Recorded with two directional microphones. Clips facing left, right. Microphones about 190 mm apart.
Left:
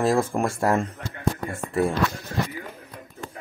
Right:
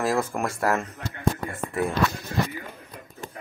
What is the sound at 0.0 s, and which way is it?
Speech, 30° left (ahead or behind).